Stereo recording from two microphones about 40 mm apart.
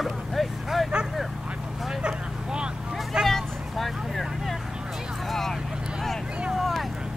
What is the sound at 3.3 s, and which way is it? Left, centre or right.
Vehicle, centre.